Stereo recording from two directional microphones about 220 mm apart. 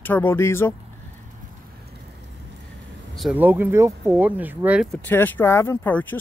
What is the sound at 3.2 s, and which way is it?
Speech, 5° right (ahead or behind).